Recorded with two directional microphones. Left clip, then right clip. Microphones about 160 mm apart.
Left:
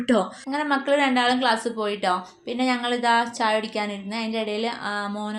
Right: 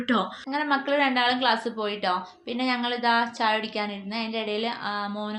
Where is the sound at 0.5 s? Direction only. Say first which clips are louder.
Left 2 dB; 50° left (ahead or behind).